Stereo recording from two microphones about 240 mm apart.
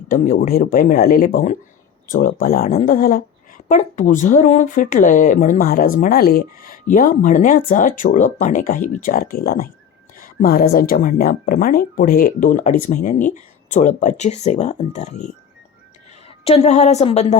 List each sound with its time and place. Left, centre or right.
0.1 s speech: left
16.4 s a woman's voice: left